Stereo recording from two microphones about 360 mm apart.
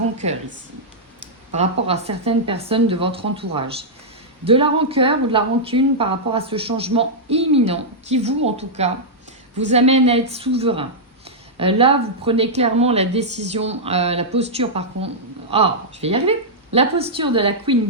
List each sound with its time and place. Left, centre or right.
0.2 s a woman's voice: centre
1.5 s a woman's voice: centre